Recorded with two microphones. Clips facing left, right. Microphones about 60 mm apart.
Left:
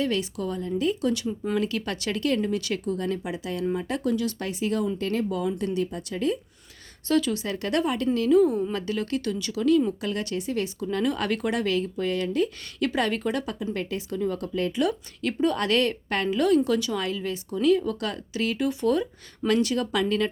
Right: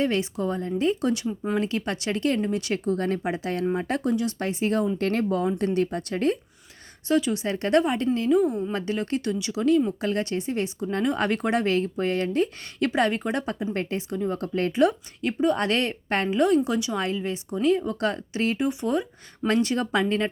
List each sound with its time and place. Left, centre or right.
0.0 s a woman's voice: right
4.1 s a woman's voice: right
4.4 s speech: right
4.9 s speech: right
7.1 s a woman's voice: right
8.7 s a woman's voice: right
12.9 s a woman's voice: right
14.8 s a woman's voice: right